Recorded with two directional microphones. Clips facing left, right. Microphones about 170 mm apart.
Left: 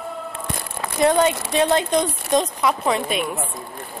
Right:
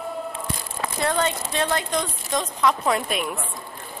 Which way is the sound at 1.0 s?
15° left (ahead or behind).